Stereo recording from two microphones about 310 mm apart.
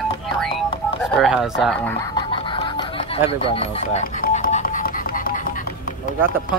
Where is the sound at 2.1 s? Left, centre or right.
Centre.